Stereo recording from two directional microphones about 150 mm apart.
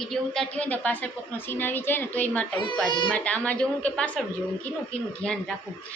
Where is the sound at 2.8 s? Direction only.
30° left (ahead or behind).